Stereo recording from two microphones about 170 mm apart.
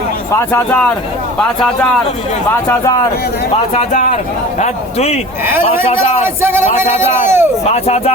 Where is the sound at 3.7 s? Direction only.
45° left (ahead or behind).